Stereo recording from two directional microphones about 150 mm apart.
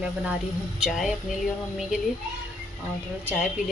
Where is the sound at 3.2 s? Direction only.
5° right (ahead or behind).